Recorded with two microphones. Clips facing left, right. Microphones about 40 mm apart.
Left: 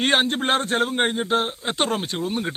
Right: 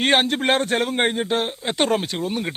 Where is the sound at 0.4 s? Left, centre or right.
Right.